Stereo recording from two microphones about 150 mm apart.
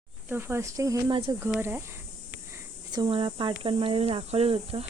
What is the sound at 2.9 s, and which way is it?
Speech, 30° right (ahead or behind).